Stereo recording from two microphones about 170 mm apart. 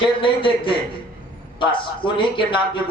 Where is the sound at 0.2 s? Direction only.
30° left (ahead or behind).